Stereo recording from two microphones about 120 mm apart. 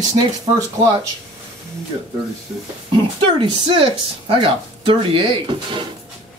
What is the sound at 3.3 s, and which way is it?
Speech, 45° right (ahead or behind).